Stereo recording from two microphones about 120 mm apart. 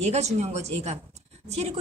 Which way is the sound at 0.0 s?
65° right (ahead or behind).